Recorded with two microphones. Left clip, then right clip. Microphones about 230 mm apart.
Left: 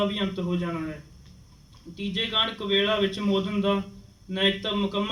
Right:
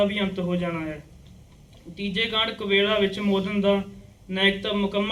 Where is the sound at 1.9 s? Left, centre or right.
Centre.